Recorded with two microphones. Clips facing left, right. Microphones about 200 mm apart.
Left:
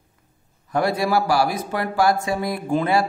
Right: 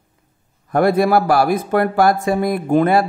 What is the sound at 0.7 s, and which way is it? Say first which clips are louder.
A man's voice: right 6 dB; 55° right (ahead or behind).